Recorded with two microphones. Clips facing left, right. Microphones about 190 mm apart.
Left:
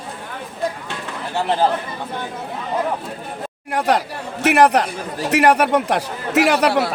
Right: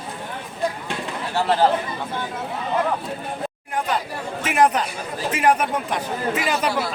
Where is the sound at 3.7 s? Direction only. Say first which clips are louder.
Left 7 dB; 75° left (ahead or behind).